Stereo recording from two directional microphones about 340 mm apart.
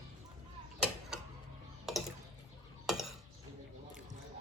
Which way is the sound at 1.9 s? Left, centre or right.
Centre.